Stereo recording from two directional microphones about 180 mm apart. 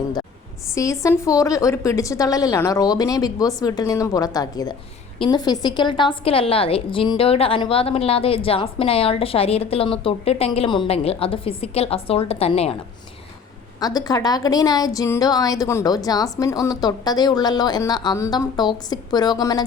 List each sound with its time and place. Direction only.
0.7 s a woman's voice: 15° left (ahead or behind); by 12.7 s 35° left (ahead or behind)
13.7 s speech: 20° left (ahead or behind)